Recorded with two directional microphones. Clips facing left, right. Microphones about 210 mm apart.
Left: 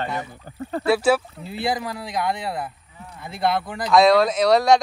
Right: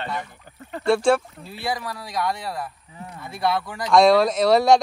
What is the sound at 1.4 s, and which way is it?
Speech, 25° left (ahead or behind).